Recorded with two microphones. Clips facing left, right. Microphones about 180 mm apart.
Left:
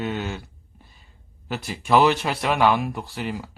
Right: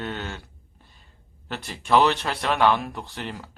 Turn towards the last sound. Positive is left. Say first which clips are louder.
# left 5 dB
turn(degrees=5)  # may be behind; listen again after turning